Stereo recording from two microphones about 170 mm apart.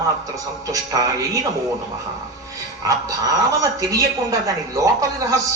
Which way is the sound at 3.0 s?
20° right (ahead or behind).